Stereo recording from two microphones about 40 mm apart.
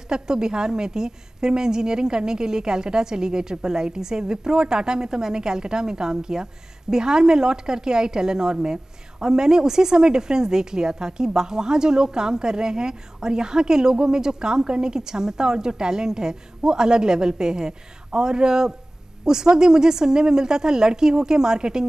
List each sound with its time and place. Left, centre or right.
0.1 s a woman's voice: centre